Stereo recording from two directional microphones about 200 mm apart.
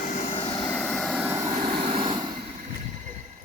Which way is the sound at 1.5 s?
25° right (ahead or behind).